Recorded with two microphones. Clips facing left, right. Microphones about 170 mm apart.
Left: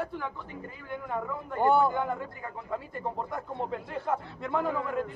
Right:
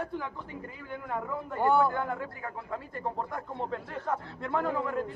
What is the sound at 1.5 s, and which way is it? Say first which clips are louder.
Speech: left 1 dB; 20° left (ahead or behind).